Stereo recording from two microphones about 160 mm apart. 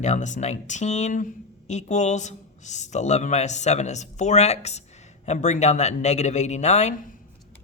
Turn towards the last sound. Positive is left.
turn(degrees=55)  # may be behind; listen again after turning